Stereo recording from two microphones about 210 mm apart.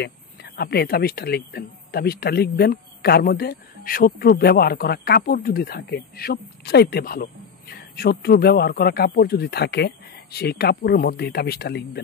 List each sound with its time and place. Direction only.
0.0 s speech: 50° left (ahead or behind)